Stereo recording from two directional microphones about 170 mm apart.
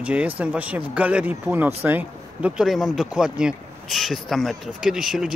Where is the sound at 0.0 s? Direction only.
10° right (ahead or behind).